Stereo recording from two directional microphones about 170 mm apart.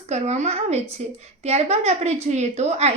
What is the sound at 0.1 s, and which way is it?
A woman's voice, 40° right (ahead or behind).